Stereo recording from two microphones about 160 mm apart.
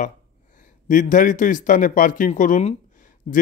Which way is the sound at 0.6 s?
55° left (ahead or behind).